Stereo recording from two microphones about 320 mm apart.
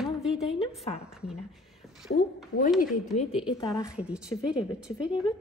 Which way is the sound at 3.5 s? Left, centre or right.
Centre.